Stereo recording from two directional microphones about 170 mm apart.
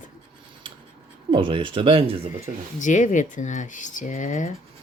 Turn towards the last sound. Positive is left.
turn(degrees=50)  # may be behind; listen again after turning